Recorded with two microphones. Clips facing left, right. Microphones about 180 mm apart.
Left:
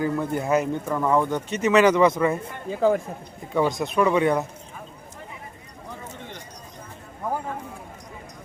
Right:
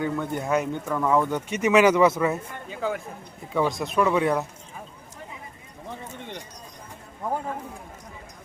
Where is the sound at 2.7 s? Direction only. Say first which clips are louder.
Left 8 dB; 35° left (ahead or behind).